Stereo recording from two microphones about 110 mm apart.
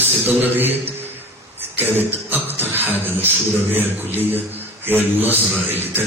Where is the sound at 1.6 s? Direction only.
20° right (ahead or behind).